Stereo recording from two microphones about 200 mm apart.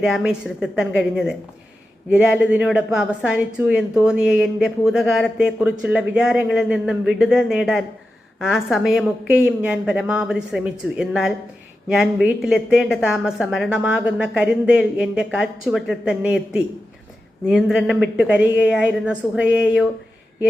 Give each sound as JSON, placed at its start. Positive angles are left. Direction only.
{"t": 0.0, "sound": "a woman's voice", "side_deg": -5}